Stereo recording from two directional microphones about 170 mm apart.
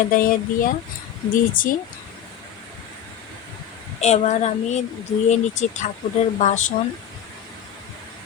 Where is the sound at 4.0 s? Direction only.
40° left (ahead or behind).